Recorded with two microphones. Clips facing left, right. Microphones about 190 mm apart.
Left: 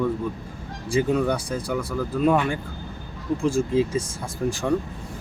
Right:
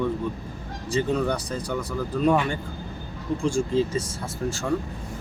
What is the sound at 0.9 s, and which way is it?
Speech, 5° left (ahead or behind).